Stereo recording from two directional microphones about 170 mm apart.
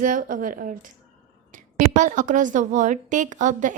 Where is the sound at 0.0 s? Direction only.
50° right (ahead or behind).